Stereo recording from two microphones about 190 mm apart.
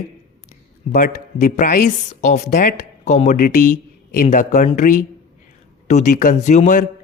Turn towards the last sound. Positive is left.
turn(degrees=40)  # may be behind; listen again after turning